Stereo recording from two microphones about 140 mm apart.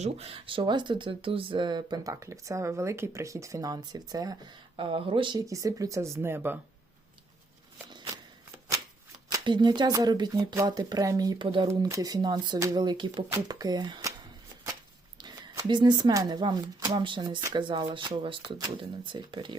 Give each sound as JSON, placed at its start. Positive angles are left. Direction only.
{"t": 0.0, "sound": "speech", "side_deg": -45}
{"t": 4.8, "sound": "speech", "side_deg": -40}
{"t": 7.9, "sound": "shuffling cards", "side_deg": -30}
{"t": 9.3, "sound": "speech", "side_deg": -30}
{"t": 11.7, "sound": "speech", "side_deg": -25}
{"t": 15.2, "sound": "speech", "side_deg": -30}